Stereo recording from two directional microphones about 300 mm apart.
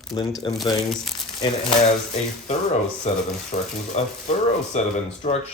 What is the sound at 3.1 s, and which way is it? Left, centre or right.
Speech, left.